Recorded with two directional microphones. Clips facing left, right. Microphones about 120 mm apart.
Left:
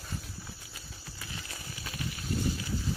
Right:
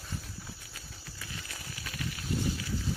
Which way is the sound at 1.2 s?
25° left (ahead or behind).